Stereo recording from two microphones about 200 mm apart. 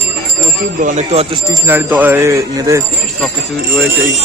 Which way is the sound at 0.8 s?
35° right (ahead or behind).